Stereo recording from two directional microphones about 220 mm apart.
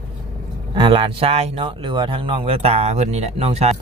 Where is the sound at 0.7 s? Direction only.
25° right (ahead or behind).